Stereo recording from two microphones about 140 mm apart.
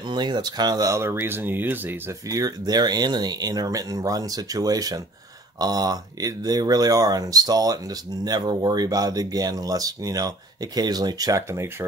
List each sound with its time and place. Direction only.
0.1 s speech: 30° right (ahead or behind); by 2.0 s 15° right (ahead or behind)
2.2 s speech: 25° right (ahead or behind)